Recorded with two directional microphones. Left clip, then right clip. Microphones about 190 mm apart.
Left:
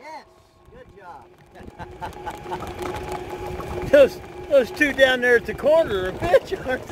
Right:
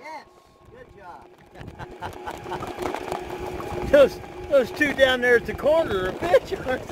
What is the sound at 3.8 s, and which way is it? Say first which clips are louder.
Speech: left 2 dB; 40° left (ahead or behind).